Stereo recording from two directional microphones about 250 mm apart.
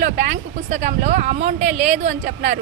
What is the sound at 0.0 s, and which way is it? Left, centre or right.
A woman's voice, right.